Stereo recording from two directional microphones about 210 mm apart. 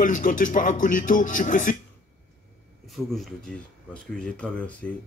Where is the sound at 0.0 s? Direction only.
40° left (ahead or behind).